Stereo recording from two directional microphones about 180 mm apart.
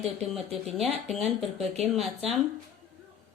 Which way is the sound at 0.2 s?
Centre (ahead or behind).